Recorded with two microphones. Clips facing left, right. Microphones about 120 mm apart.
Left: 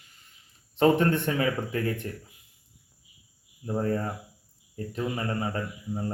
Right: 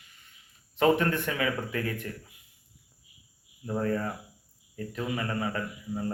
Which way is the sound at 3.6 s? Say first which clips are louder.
Left 1 dB; 30° left (ahead or behind).